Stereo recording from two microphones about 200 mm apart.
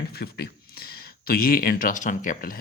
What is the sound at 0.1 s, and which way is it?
Speech, 50° left (ahead or behind).